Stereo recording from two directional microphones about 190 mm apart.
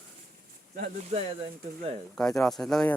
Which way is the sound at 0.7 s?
40° right (ahead or behind).